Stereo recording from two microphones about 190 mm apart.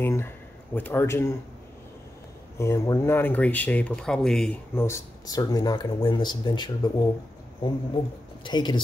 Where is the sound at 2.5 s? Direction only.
15° left (ahead or behind).